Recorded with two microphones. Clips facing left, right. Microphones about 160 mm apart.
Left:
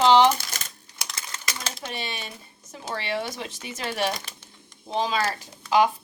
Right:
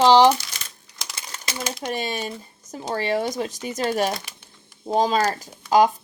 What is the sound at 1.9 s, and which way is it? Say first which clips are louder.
Speech: right 10 dB; 45° right (ahead or behind).